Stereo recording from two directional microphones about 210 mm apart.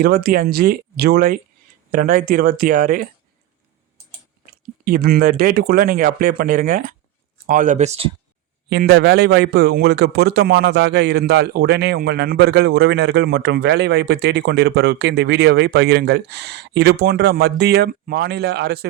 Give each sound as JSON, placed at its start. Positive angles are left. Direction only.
{"t": 0.0, "sound": "speech", "side_deg": -45}
{"t": 4.5, "sound": "speech", "side_deg": -45}
{"t": 8.7, "sound": "speech", "side_deg": -50}